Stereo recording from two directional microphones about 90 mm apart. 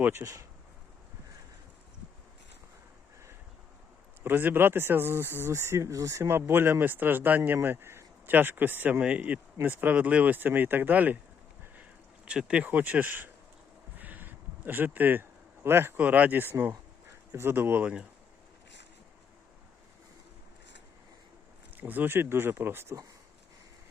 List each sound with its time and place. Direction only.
0.0 s speech: 30° right (ahead or behind)
4.2 s speech: 25° right (ahead or behind)
11.6 s a sound: 15° right (ahead or behind)
21.8 s speech: 20° right (ahead or behind)